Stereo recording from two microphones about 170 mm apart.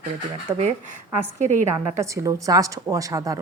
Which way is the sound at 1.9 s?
20° right (ahead or behind).